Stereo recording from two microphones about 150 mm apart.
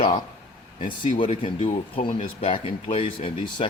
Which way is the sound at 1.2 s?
40° left (ahead or behind).